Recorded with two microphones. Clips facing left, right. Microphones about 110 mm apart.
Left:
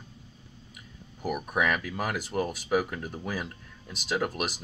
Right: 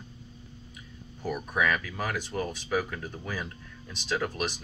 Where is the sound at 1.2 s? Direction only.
15° left (ahead or behind).